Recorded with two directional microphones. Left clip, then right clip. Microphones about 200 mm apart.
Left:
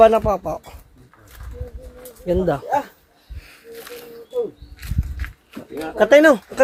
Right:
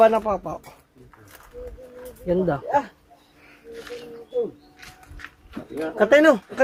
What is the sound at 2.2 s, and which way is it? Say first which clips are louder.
Speech: left 3 dB; 55° left (ahead or behind).